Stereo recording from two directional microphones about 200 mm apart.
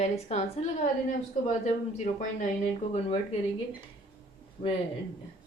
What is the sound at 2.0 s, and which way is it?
Speech, 40° left (ahead or behind).